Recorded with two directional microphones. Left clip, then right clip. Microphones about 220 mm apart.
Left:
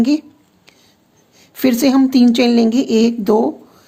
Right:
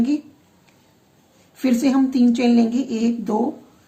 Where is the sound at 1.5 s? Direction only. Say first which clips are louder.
Left 5 dB; 50° left (ahead or behind).